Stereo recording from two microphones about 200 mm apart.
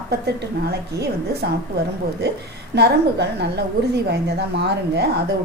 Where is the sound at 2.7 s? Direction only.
55° right (ahead or behind).